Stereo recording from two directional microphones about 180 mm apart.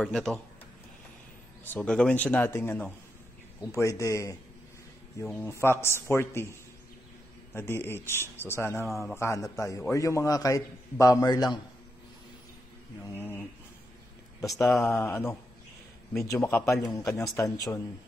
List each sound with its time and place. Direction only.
0.0 s speech: 5° left (ahead or behind)
1.6 s a man's voice: 10° left (ahead or behind)
13.2 s speech: 10° left (ahead or behind)
14.4 s a man's voice: centre (ahead or behind); by 17.8 s 20° left (ahead or behind)